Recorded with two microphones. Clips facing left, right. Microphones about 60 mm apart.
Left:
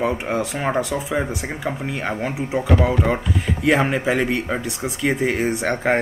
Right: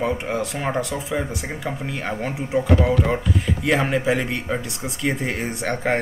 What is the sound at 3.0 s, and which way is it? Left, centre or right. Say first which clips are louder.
Speech: left 1 dB; centre.